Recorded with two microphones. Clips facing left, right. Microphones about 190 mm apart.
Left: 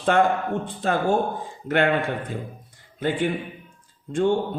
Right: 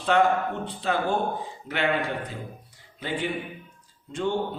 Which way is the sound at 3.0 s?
50° left (ahead or behind).